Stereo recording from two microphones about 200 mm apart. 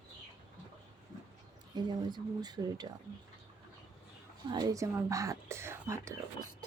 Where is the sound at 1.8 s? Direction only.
20° right (ahead or behind).